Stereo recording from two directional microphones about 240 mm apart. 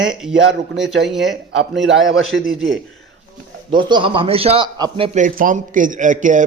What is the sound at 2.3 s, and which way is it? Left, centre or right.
Speech, right.